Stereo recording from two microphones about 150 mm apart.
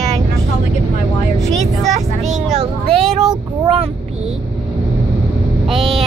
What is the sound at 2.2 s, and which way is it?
Speech, 45° right (ahead or behind).